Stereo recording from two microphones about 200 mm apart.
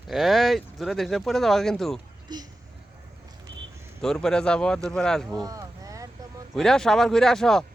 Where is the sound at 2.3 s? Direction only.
20° right (ahead or behind).